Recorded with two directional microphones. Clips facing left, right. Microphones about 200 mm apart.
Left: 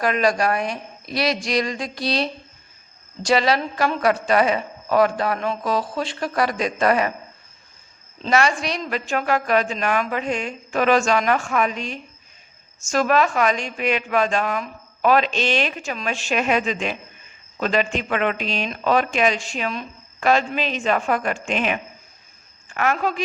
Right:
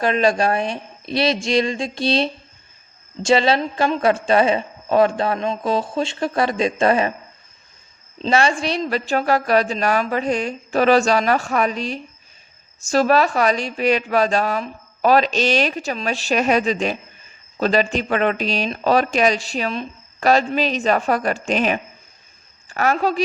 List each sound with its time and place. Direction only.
0.0 s a woman's voice: 25° right (ahead or behind)
8.2 s speech: 30° right (ahead or behind)